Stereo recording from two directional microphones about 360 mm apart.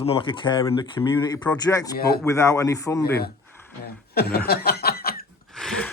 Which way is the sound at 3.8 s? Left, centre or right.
Left.